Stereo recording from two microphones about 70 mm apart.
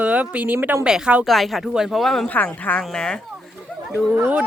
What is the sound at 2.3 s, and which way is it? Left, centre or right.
Speech, left.